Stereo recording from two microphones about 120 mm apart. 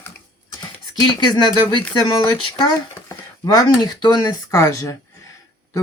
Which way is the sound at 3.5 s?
30° left (ahead or behind).